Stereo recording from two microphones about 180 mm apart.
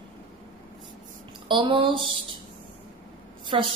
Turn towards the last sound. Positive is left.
turn(degrees=-30)  # may be behind; listen again after turning